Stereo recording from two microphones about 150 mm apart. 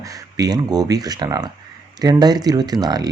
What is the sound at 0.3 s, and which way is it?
Speech, 25° right (ahead or behind).